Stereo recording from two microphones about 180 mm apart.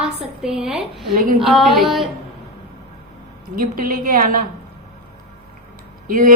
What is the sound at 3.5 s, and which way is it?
Speech, 50° right (ahead or behind).